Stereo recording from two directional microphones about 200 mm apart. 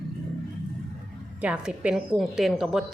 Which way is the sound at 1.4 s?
5° right (ahead or behind).